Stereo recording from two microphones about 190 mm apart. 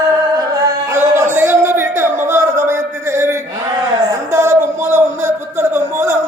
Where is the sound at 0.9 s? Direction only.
15° right (ahead or behind).